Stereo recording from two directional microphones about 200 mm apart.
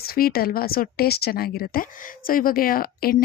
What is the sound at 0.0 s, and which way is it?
A woman's voice, 50° left (ahead or behind).